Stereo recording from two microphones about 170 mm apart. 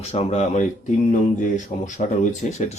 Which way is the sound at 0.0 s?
40° left (ahead or behind).